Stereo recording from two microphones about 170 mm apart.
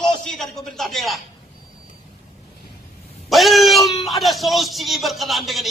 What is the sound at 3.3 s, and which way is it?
Speech, centre (ahead or behind).